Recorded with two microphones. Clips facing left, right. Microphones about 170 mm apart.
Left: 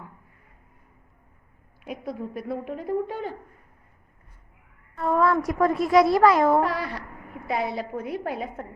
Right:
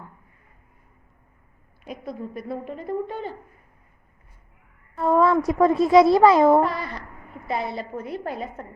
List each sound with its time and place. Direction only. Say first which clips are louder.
1.8 s speech: left 1 dB; 10° left (ahead or behind)
4.9 s speech: right 3 dB; 25° right (ahead or behind)
6.6 s speech: right 2 dB; 10° left (ahead or behind)